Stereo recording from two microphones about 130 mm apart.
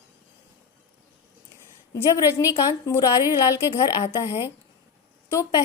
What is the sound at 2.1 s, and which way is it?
A woman's voice, 25° left (ahead or behind).